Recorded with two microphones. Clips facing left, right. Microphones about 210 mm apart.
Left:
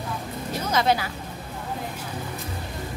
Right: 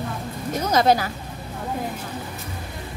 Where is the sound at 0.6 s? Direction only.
40° right (ahead or behind).